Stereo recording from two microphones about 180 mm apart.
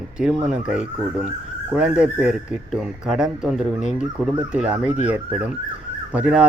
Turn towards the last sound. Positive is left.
turn(degrees=-5)  # may be behind; listen again after turning